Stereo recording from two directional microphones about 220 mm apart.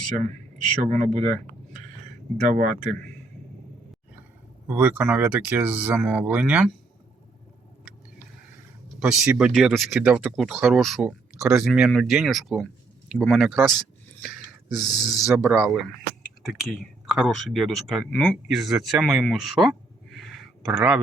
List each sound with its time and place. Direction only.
0.8 s speech: 30° right (ahead or behind)
2.5 s speech: 40° right (ahead or behind)
4.7 s speech: 5° right (ahead or behind)
9.0 s speech: 5° right (ahead or behind)
14.2 s gasp: centre (ahead or behind)
15.3 s speech: centre (ahead or behind)
17.1 s speech: centre (ahead or behind)
20.1 s a sound: centre (ahead or behind)